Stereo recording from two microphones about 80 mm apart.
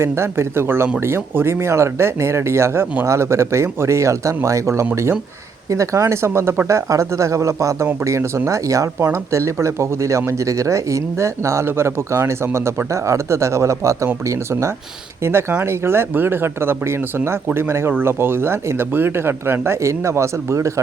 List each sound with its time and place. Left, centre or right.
0.0 s speech: right